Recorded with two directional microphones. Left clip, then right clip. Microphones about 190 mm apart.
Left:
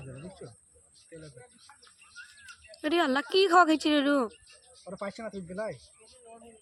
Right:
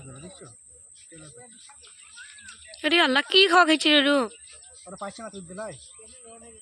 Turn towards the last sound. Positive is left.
turn(degrees=35)  # may be behind; listen again after turning